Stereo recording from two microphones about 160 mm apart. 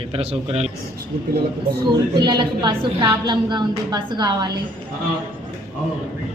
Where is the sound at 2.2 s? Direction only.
30° right (ahead or behind).